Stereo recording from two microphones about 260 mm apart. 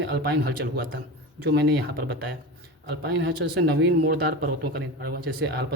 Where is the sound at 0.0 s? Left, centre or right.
Right.